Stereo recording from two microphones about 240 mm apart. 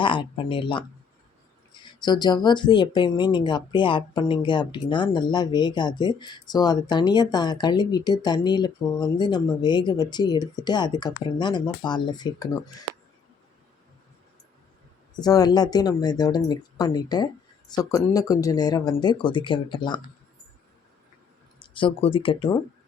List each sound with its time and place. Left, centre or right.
0.0 s speech: left
15.1 s speech: centre
21.6 s speech: left